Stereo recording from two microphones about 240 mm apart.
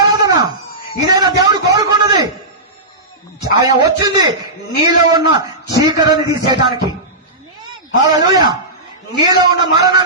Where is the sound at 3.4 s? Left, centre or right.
Centre.